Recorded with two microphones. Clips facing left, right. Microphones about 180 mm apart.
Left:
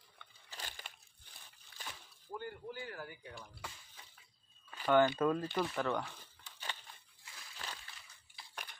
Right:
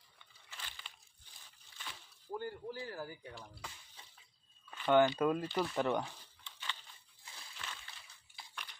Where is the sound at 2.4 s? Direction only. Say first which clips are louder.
Right 2 dB; 35° right (ahead or behind).